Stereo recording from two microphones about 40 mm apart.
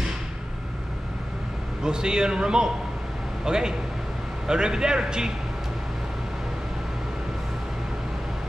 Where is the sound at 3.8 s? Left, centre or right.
Centre.